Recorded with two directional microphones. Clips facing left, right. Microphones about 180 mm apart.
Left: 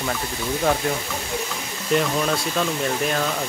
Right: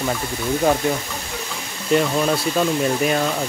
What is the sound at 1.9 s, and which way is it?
Speech, 5° right (ahead or behind).